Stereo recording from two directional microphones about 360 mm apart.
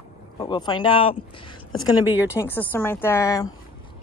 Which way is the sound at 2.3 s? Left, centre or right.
Centre.